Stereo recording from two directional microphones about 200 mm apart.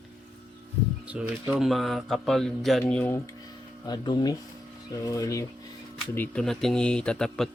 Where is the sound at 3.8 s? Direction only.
20° left (ahead or behind).